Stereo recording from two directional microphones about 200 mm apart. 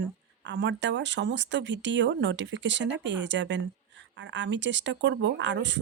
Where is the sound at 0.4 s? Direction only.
65° right (ahead or behind).